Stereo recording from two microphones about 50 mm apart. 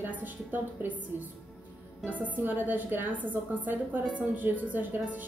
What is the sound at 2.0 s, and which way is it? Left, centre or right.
A woman's voice, right.